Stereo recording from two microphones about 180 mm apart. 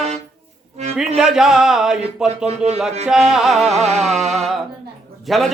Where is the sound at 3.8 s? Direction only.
40° right (ahead or behind).